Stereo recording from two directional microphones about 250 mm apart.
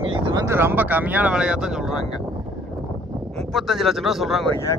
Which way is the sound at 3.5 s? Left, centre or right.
Centre.